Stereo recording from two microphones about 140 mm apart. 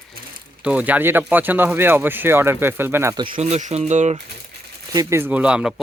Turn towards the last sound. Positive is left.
turn(degrees=-5)  # may be behind; listen again after turning